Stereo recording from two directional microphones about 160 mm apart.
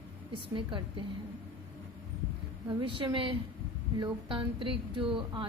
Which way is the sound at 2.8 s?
30° right (ahead or behind).